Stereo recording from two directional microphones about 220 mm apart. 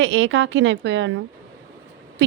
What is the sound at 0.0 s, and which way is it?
Speech, 60° right (ahead or behind).